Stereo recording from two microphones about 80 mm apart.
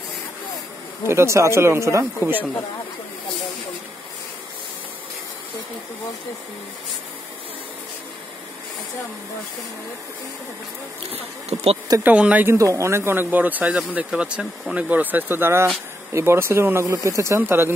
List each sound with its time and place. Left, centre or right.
1.0 s speech: right
2.1 s speech: right
12.0 s speech: centre
12.4 s speech: right
17.4 s speech: right